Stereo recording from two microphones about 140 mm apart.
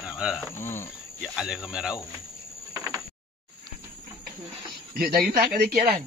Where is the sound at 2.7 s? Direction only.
25° right (ahead or behind).